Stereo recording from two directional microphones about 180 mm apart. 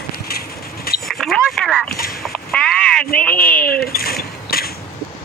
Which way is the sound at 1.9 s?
55° left (ahead or behind).